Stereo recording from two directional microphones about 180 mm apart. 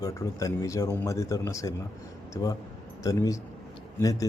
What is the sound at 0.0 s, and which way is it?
A man's voice, 15° left (ahead or behind).